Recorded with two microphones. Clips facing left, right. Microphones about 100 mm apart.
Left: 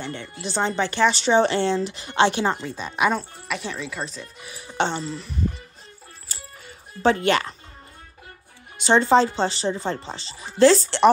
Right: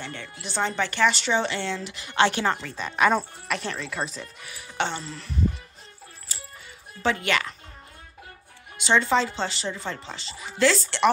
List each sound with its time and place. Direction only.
0.0 s speech: 25° left (ahead or behind)
3.1 s speech: 5° left (ahead or behind)
4.4 s speech: 25° left (ahead or behind)
7.0 s speech: 35° left (ahead or behind)
8.7 s speech: 35° left (ahead or behind)